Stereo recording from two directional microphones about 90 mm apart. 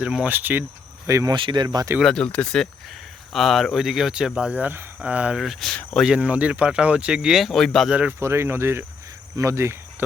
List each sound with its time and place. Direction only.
0.0 s speech: 15° right (ahead or behind)
1.0 s speech: 35° right (ahead or behind)
1.3 s speech: 60° right (ahead or behind)
2.0 s speech: 5° left (ahead or behind)
3.3 s speech: centre (ahead or behind)
5.4 s speech: centre (ahead or behind)
6.1 s speech: 15° right (ahead or behind); by 7.9 s 5° left (ahead or behind)
7.9 s speech: 15° right (ahead or behind)
8.2 s speech: 30° right (ahead or behind)